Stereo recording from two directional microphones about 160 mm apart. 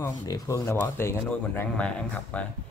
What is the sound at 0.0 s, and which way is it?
Speech, 20° left (ahead or behind).